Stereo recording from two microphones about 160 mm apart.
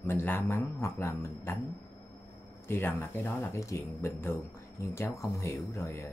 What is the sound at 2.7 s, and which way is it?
Speech, 15° left (ahead or behind).